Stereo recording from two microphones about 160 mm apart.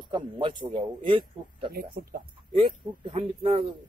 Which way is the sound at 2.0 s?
65° right (ahead or behind).